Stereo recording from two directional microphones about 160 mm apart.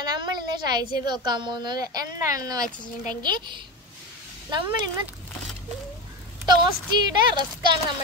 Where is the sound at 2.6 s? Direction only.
55° left (ahead or behind).